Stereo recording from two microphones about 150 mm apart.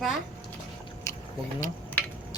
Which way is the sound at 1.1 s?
20° left (ahead or behind).